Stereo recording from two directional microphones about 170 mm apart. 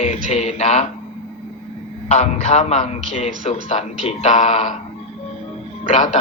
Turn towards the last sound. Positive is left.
turn(degrees=45)  # may be behind; listen again after turning